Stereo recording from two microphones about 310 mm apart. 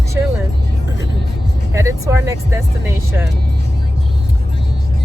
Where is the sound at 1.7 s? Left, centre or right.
Centre.